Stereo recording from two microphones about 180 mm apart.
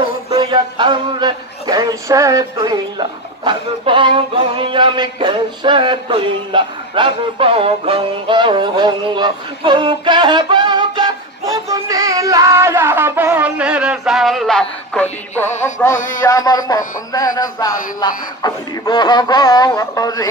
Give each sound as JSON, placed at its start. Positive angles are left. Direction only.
{"t": 0.3, "sound": "speech", "side_deg": -25}
{"t": 15.6, "sound": "music", "side_deg": 15}
{"t": 16.3, "sound": "speech", "side_deg": 20}